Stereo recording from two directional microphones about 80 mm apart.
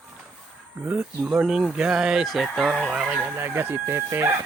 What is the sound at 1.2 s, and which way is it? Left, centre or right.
Fowl, centre.